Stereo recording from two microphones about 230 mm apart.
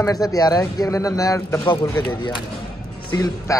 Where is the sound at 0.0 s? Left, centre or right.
Centre.